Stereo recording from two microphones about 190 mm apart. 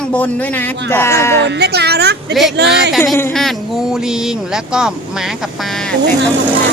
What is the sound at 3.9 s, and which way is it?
Speech, 5° right (ahead or behind).